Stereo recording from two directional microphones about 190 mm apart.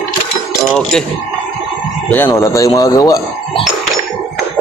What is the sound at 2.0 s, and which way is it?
Speech, 10° left (ahead or behind).